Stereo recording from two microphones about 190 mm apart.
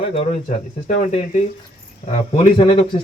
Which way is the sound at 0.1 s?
35° left (ahead or behind).